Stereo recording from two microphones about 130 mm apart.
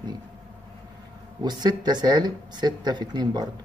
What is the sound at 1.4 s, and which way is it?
Speech, 35° right (ahead or behind).